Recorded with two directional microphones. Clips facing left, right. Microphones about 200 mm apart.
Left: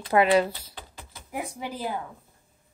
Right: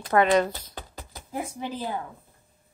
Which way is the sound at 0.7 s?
40° right (ahead or behind).